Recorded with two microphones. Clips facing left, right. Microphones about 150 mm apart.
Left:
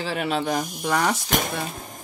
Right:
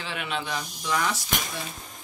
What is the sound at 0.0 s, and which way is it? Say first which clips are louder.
Speech: left 7 dB; 40° left (ahead or behind).